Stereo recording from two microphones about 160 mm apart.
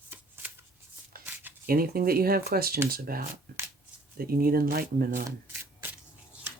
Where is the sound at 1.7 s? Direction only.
70° right (ahead or behind).